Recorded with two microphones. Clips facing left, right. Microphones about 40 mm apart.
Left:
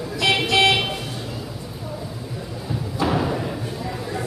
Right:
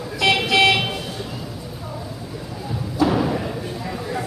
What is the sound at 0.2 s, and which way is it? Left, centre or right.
Vehicle, centre.